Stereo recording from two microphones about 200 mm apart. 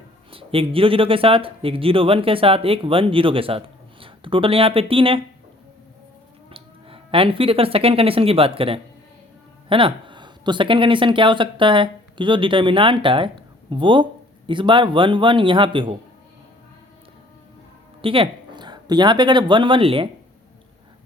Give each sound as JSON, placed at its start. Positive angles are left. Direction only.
{"t": 0.3, "sound": "a man's voice", "side_deg": -25}
{"t": 6.5, "sound": "speech", "side_deg": -25}
{"t": 18.0, "sound": "speech", "side_deg": -25}